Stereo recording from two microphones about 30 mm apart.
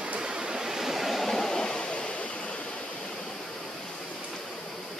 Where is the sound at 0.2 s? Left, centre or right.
Right; by 1.1 s centre.